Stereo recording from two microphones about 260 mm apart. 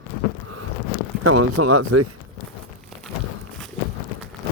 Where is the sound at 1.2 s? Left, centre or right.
Right.